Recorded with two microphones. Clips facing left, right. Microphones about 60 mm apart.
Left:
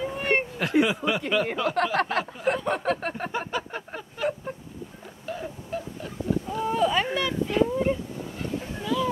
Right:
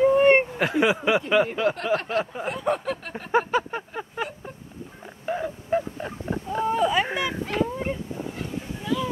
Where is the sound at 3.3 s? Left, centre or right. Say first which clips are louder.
Right 7 dB; right.